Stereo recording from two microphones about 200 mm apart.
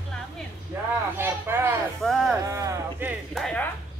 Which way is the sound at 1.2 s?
10° right (ahead or behind).